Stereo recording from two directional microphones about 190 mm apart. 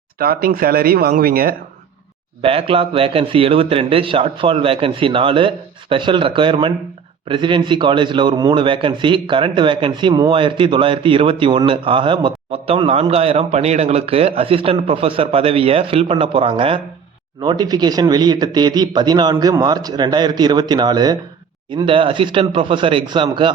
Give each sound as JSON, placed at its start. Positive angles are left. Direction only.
{"t": 0.2, "sound": "speech", "side_deg": -50}
{"t": 2.4, "sound": "a man's voice", "side_deg": -30}